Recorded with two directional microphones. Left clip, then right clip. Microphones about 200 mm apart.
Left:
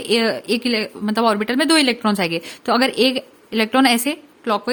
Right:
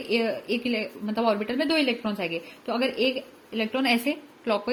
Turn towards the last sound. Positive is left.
turn(degrees=35)  # may be behind; listen again after turning